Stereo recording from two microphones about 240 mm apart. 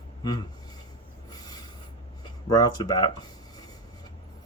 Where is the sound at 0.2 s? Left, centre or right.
Centre.